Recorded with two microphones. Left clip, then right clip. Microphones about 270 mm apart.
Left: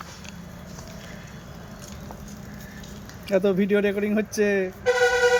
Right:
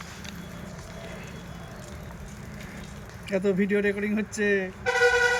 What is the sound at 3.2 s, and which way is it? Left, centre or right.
Speech, left.